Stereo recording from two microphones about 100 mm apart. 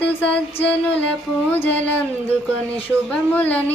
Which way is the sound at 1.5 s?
15° left (ahead or behind).